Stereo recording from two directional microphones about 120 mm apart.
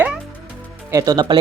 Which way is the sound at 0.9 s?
30° right (ahead or behind).